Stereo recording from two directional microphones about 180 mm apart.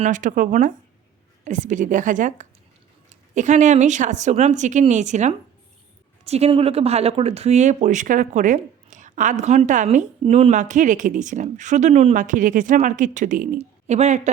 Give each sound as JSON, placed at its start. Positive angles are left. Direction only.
{"t": 0.0, "sound": "a woman's voice", "side_deg": -45}